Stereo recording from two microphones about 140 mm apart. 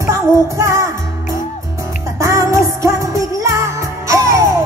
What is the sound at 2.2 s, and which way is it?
Music, 25° right (ahead or behind).